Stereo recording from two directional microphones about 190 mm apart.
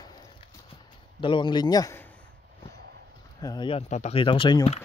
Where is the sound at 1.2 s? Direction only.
25° left (ahead or behind).